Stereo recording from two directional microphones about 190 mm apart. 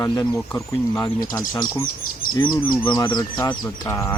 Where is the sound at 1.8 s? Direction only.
45° left (ahead or behind).